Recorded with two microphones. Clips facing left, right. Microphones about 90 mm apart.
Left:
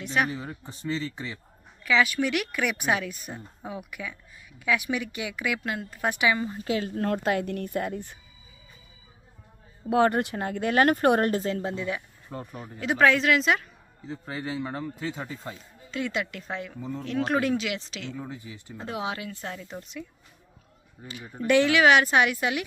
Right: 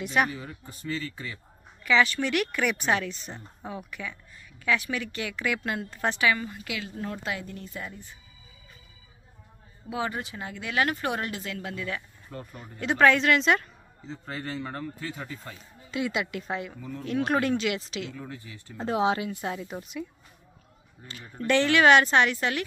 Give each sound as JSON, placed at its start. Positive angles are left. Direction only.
{"t": 0.0, "sound": "speech", "side_deg": -5}
{"t": 0.3, "sound": "a man's voice", "side_deg": 30}
{"t": 1.8, "sound": "speech", "side_deg": 0}
{"t": 6.1, "sound": "a man's voice", "side_deg": 20}
{"t": 7.0, "sound": "speech", "side_deg": 55}
{"t": 9.8, "sound": "speech", "side_deg": 55}
{"t": 12.5, "sound": "speech", "side_deg": 5}
{"t": 15.9, "sound": "speech", "side_deg": -5}
{"t": 18.1, "sound": "speech", "side_deg": 15}
{"t": 18.8, "sound": "speech", "side_deg": -35}
{"t": 19.3, "sound": "speech", "side_deg": -15}
{"t": 21.0, "sound": "speech", "side_deg": 10}